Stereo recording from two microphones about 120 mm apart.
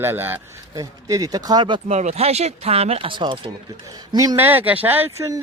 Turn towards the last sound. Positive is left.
turn(degrees=-25)  # may be behind; listen again after turning